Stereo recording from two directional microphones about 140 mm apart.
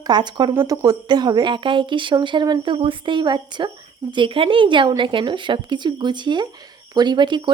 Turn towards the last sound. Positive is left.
turn(degrees=-35)  # may be behind; listen again after turning